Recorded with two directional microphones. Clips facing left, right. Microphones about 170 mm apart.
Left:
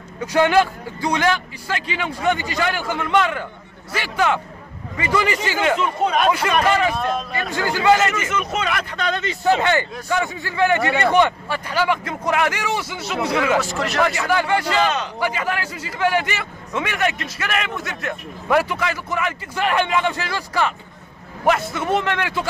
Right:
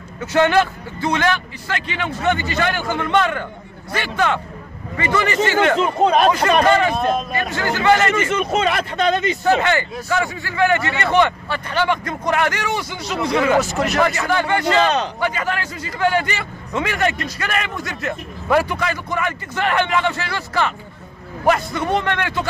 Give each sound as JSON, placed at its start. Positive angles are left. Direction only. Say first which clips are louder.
{"t": 0.2, "sound": "a man's voice", "louder": "even", "side_deg": 10}
{"t": 5.8, "sound": "speech", "louder": "right 4 dB", "side_deg": -35}
{"t": 7.0, "sound": "a man's voice", "louder": "right 3 dB", "side_deg": -20}
{"t": 7.5, "sound": "a man's voice", "louder": "even", "side_deg": 15}
{"t": 8.1, "sound": "a man's voice", "louder": "right 5 dB", "side_deg": -30}
{"t": 9.4, "sound": "a man's voice", "louder": "right 1 dB", "side_deg": 15}
{"t": 13.6, "sound": "a man's voice", "louder": "right 3 dB", "side_deg": -20}
{"t": 14.0, "sound": "a man's voice", "louder": "right 1 dB", "side_deg": 5}